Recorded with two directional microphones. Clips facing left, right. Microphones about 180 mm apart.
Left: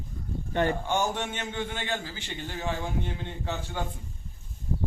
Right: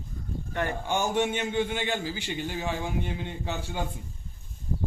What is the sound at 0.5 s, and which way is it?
Speech, 25° left (ahead or behind).